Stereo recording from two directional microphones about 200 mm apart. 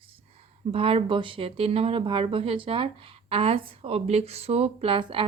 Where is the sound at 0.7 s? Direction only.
25° right (ahead or behind).